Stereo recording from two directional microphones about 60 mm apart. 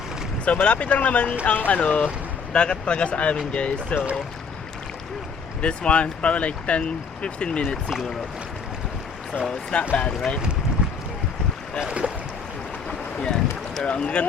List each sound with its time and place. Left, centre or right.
0.4 s speech: left
5.6 s speech: centre
7.9 s speech: centre
9.7 s speech: centre
11.8 s speech: centre
12.9 s boat: centre
13.9 s speech: centre